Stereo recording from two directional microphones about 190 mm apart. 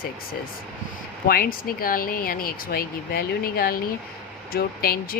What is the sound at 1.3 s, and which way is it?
Speech, 50° left (ahead or behind).